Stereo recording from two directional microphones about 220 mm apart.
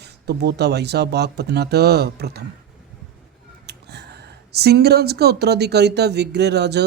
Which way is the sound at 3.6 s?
50° right (ahead or behind).